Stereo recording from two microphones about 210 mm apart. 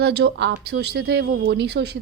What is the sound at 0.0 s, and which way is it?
A woman's voice, 50° right (ahead or behind).